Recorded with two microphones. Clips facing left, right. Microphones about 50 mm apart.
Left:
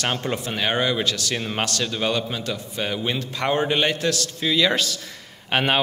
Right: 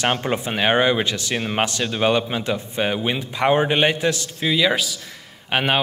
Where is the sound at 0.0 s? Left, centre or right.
Right.